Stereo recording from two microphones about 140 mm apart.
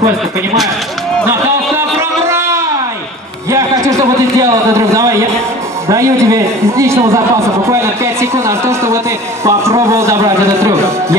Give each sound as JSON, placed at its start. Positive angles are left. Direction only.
{"t": 1.8, "sound": "music", "side_deg": -20}
{"t": 3.4, "sound": "a sound", "side_deg": -20}
{"t": 5.9, "sound": "a man's voice", "side_deg": -20}